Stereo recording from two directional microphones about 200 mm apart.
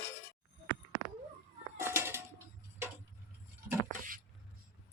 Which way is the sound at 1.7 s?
10° right (ahead or behind).